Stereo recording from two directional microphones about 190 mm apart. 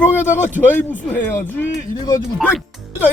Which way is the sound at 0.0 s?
10° left (ahead or behind).